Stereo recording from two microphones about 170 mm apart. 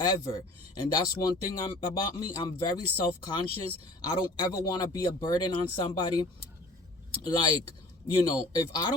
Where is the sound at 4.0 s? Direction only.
25° left (ahead or behind).